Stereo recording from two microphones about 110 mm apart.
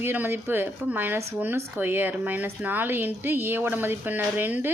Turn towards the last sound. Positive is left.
turn(degrees=-15)  # may be behind; listen again after turning